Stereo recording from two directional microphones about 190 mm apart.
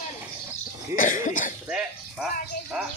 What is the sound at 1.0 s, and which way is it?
Cough, 45° left (ahead or behind).